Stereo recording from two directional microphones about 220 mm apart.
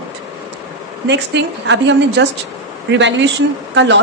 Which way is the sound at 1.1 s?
55° right (ahead or behind).